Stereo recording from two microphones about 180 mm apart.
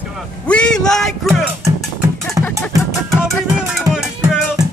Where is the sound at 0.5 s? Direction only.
5° left (ahead or behind).